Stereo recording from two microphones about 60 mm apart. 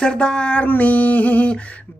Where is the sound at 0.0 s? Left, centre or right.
Centre.